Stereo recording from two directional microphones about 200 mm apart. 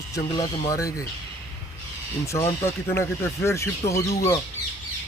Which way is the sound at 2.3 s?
15° left (ahead or behind).